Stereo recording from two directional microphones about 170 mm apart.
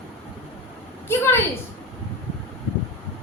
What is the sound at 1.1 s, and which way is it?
Speech, 15° left (ahead or behind).